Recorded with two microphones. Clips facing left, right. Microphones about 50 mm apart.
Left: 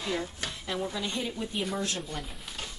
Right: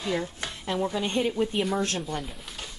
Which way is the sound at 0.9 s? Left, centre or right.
Right.